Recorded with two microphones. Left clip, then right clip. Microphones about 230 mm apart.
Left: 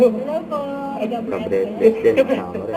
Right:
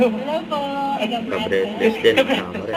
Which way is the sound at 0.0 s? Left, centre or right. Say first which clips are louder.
Left 3 dB; centre.